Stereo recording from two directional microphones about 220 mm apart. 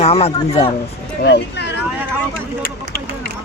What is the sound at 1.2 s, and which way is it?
Speech, 50° left (ahead or behind).